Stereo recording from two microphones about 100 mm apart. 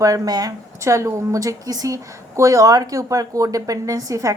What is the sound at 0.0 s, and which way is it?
A woman's voice, 35° right (ahead or behind).